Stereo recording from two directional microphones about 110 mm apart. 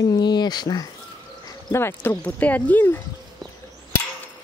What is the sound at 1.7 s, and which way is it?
Speech, 20° left (ahead or behind).